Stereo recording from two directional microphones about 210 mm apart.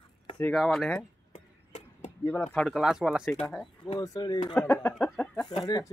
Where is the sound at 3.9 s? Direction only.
15° left (ahead or behind).